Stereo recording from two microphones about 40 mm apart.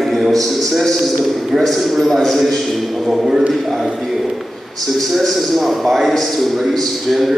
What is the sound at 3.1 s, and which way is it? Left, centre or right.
Speech, centre.